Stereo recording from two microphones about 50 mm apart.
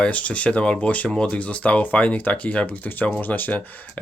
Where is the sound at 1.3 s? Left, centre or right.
Left.